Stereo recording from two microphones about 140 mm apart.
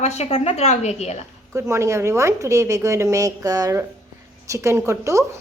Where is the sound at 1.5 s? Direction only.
20° right (ahead or behind).